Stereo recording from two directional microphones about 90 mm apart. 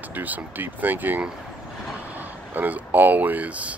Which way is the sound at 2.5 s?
20° right (ahead or behind).